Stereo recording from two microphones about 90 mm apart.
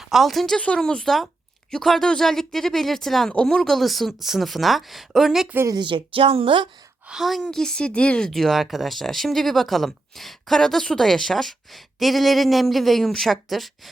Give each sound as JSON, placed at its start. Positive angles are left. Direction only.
{"t": 0.0, "sound": "speech", "side_deg": 0}
{"t": 5.8, "sound": "a woman's voice", "side_deg": -80}
{"t": 7.1, "sound": "speech", "side_deg": 0}
{"t": 8.3, "sound": "speech", "side_deg": 0}